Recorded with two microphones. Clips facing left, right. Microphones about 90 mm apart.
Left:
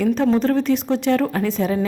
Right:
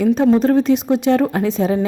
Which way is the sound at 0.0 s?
20° right (ahead or behind).